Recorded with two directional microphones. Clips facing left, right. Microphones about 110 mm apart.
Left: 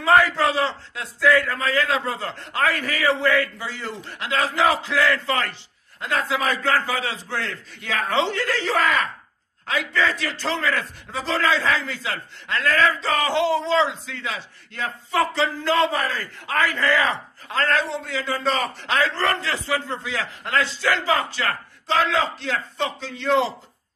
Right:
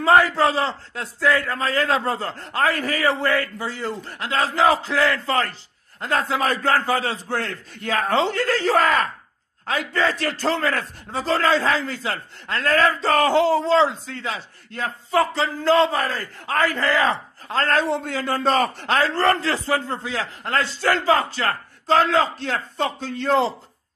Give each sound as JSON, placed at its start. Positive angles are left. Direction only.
{"t": 0.0, "sound": "a man's voice", "side_deg": -35}
{"t": 14.2, "sound": "a man's voice", "side_deg": -30}
{"t": 17.6, "sound": "a man's voice", "side_deg": -50}